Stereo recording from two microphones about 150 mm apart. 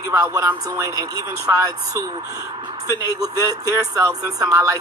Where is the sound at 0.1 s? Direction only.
20° right (ahead or behind).